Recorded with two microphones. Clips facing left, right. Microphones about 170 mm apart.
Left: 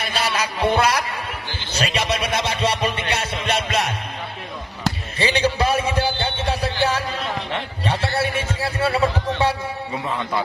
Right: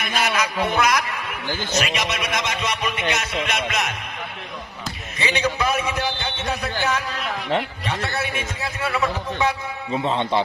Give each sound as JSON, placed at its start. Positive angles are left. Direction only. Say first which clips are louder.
{"t": 0.0, "sound": "a man's voice", "louder": "right 1 dB", "side_deg": 30}
{"t": 3.4, "sound": "music", "louder": "left 3 dB", "side_deg": 30}
{"t": 5.2, "sound": "a sound", "louder": "left 3 dB", "side_deg": 30}
{"t": 9.9, "sound": "a man's voice", "louder": "right 5 dB", "side_deg": -25}